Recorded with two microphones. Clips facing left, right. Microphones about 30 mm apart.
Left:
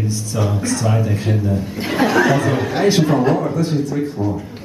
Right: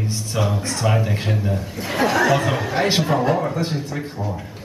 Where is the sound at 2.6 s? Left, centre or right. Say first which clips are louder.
Left 4 dB; centre.